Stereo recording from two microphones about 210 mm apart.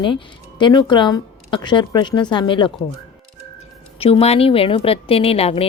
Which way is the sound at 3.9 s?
25° left (ahead or behind).